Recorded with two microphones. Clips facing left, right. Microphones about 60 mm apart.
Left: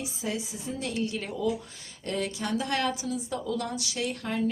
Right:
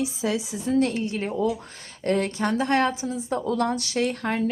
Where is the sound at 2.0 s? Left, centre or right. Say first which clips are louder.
Right 8 dB; right.